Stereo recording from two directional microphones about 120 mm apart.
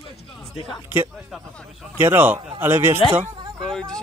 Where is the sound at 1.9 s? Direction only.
20° right (ahead or behind).